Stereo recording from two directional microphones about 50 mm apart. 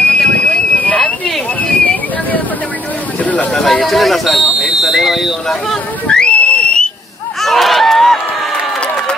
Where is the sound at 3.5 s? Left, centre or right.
Centre.